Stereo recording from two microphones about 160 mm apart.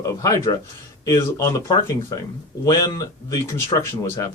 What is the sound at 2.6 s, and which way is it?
Speech, 20° left (ahead or behind).